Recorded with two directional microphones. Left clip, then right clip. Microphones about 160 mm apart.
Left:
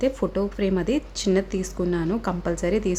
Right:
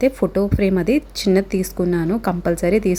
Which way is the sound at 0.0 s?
25° right (ahead or behind).